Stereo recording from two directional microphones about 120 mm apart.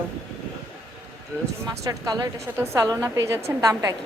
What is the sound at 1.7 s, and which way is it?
Speech, 30° right (ahead or behind).